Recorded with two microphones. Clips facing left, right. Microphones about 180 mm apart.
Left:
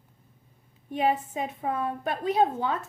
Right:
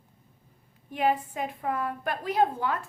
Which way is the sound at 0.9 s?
25° left (ahead or behind).